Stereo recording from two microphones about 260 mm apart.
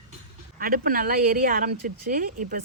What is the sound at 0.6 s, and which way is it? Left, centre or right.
A woman's voice, right.